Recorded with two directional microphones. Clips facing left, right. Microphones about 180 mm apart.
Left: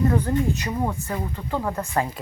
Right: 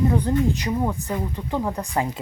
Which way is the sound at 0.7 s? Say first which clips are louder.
Right 2 dB; 5° left (ahead or behind).